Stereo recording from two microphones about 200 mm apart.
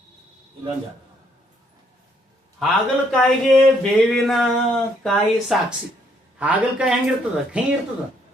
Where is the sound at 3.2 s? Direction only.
5° left (ahead or behind).